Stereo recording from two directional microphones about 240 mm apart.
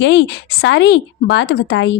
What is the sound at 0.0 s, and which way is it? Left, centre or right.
A woman's voice, left.